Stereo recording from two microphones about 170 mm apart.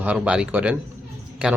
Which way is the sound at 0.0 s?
5° right (ahead or behind).